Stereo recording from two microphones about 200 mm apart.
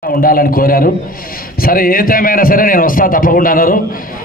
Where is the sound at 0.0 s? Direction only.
45° left (ahead or behind).